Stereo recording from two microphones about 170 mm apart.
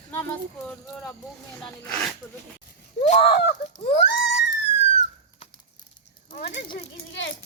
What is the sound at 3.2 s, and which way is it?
Speech, 75° left (ahead or behind).